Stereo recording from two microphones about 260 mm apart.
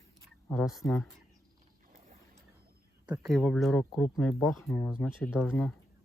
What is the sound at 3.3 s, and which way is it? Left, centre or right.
Speech, centre.